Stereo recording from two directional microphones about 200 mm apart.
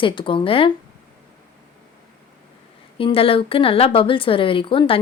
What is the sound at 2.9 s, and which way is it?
A woman's voice, 25° left (ahead or behind).